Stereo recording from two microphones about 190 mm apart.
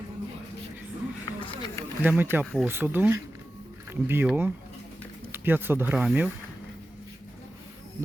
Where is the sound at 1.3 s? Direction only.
25° left (ahead or behind).